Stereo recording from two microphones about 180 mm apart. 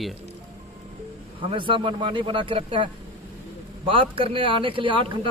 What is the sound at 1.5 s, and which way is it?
Speech, 30° right (ahead or behind).